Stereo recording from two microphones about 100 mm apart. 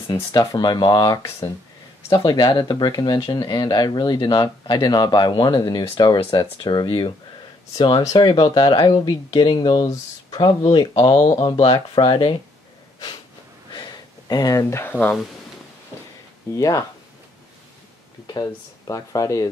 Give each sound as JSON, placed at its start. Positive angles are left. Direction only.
{"t": 0.1, "sound": "speech", "side_deg": 40}
{"t": 13.7, "sound": "a sound", "side_deg": 45}
{"t": 16.5, "sound": "speech", "side_deg": 35}
{"t": 18.2, "sound": "speech", "side_deg": 40}